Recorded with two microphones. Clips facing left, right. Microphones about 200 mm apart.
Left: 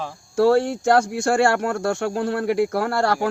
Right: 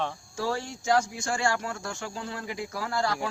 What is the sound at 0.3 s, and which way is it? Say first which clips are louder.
Speech: left 15 dB; 65° left (ahead or behind).